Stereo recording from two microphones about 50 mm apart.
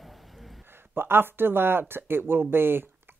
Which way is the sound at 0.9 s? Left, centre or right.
Right.